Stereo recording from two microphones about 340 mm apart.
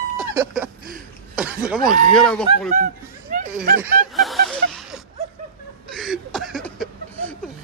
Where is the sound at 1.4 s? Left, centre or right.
Centre.